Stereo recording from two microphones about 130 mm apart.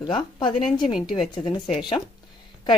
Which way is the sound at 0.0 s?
35° left (ahead or behind).